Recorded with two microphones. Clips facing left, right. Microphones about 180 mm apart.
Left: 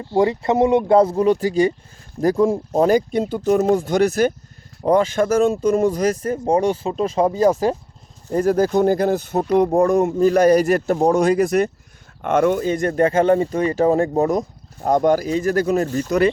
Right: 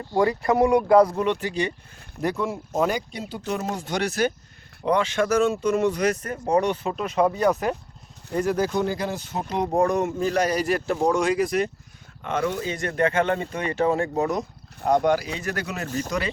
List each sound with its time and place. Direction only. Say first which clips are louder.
0.0 s speech: left 4 dB; 20° left (ahead or behind); by 6.1 s 40° left (ahead or behind)
6.2 s speech: left 4 dB; 30° left (ahead or behind)
8.3 s speech: left 6 dB; 40° left (ahead or behind)
12.9 s speech: left 6 dB; 35° left (ahead or behind)
16.0 s speech: left 12 dB; 55° left (ahead or behind)